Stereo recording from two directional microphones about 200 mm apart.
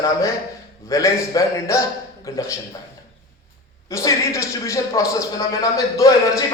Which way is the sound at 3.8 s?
15° left (ahead or behind).